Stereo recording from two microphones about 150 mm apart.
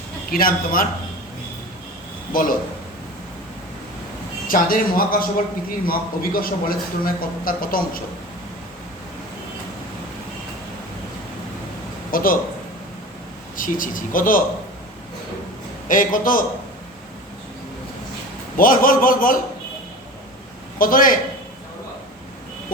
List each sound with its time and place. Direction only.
0.3 s a man's voice: 75° left (ahead or behind)
2.3 s speech: 65° left (ahead or behind)
4.4 s a man's voice: 70° left (ahead or behind)
12.1 s a man's voice: 70° left (ahead or behind)
13.6 s speech: 65° left (ahead or behind)
15.9 s speech: 65° left (ahead or behind)
18.5 s a man's voice: 70° left (ahead or behind)
20.7 s speech: 65° left (ahead or behind)